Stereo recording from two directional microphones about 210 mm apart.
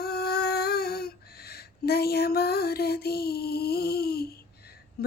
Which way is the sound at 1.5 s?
50° left (ahead or behind).